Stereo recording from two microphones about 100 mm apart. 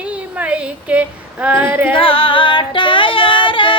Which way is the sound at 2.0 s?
65° left (ahead or behind).